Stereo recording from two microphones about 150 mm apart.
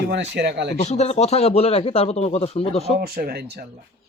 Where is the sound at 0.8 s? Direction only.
50° left (ahead or behind).